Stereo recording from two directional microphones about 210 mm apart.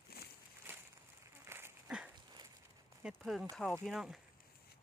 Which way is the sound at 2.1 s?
20° right (ahead or behind).